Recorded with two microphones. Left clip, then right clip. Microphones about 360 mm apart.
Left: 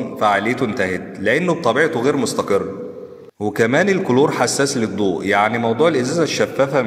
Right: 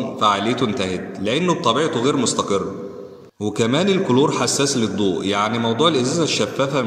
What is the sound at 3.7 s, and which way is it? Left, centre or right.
A man's voice, centre.